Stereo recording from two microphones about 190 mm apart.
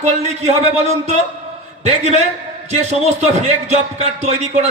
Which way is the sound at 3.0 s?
35° right (ahead or behind).